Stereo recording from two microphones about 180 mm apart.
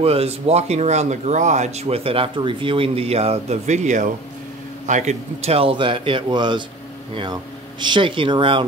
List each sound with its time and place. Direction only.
0.0 s a man's voice: 35° right (ahead or behind)
7.8 s a man's voice: 25° right (ahead or behind)